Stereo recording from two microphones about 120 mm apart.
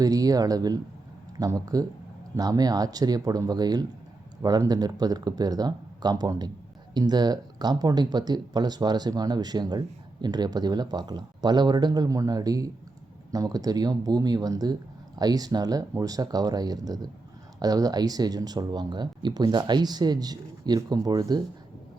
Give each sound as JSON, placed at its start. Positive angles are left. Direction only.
{"t": 0.0, "sound": "speech", "side_deg": -30}